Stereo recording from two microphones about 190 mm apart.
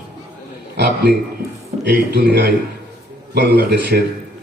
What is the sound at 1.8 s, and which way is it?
A man's voice, 60° right (ahead or behind).